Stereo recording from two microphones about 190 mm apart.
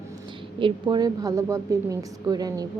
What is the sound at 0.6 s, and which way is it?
A woman's voice, 25° right (ahead or behind).